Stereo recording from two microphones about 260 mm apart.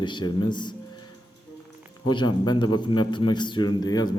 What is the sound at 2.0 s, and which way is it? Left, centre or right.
A man's voice, centre.